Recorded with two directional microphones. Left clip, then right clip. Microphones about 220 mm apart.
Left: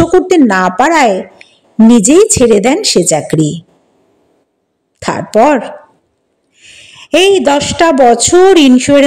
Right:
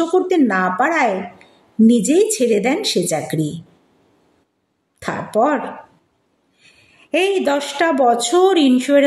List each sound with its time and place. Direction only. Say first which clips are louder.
0.3 s speech: left 8 dB; 35° left (ahead or behind)
5.0 s a woman's voice: left 9 dB; 35° left (ahead or behind)